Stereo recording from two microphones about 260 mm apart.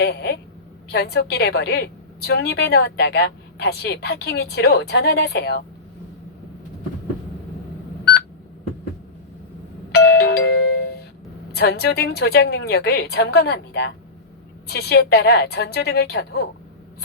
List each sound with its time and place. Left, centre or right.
0.0 s speech: left
9.9 s doorbell: left
11.5 s speech: left